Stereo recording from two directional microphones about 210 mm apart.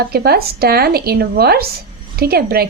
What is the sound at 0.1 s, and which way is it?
Speech, 50° right (ahead or behind).